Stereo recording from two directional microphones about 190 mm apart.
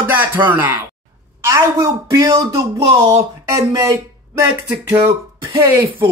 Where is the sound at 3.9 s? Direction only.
15° right (ahead or behind).